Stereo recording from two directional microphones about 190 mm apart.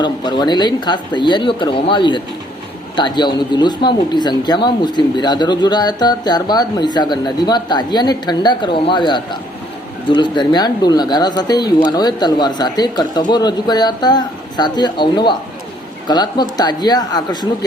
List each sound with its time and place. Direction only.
0.0 s speech: 25° left (ahead or behind)